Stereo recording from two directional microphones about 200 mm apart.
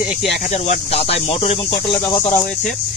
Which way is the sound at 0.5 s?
35° left (ahead or behind).